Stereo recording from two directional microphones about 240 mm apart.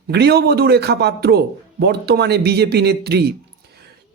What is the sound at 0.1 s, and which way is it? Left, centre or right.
Speech, right.